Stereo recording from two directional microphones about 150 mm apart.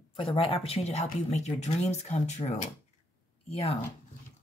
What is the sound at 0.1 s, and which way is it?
Speech, 40° left (ahead or behind).